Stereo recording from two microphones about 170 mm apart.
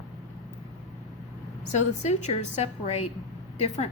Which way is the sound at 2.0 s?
40° left (ahead or behind).